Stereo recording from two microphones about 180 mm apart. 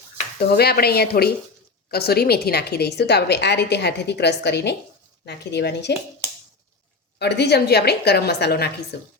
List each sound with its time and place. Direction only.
0.3 s a woman's voice: 60° left (ahead or behind)
7.2 s a woman's voice: 70° left (ahead or behind)